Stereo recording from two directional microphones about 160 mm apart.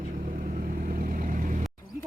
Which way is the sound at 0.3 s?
55° right (ahead or behind).